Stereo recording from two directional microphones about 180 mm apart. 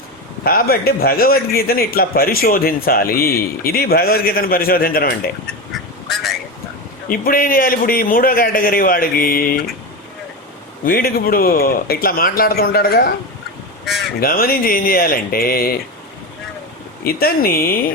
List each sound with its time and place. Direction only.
0.4 s a man's voice: 55° left (ahead or behind)
7.1 s a man's voice: 50° left (ahead or behind)
10.8 s a man's voice: 55° left (ahead or behind)
14.2 s a man's voice: 55° left (ahead or behind)
17.0 s a man's voice: 55° left (ahead or behind)